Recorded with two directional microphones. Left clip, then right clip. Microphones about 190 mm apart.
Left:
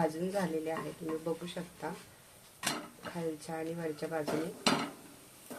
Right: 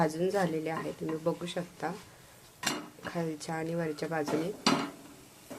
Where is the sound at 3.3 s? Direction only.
35° right (ahead or behind).